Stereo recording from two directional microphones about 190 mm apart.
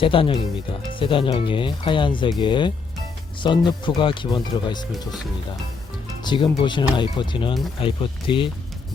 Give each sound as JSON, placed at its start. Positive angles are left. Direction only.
{"t": 0.0, "sound": "speech", "side_deg": 25}
{"t": 6.2, "sound": "speech", "side_deg": 25}